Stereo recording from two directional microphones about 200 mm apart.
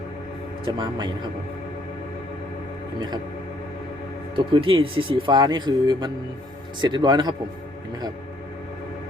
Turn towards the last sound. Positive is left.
turn(degrees=-20)  # may be behind; listen again after turning